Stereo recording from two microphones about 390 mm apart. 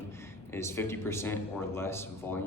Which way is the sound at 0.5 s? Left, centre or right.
Centre.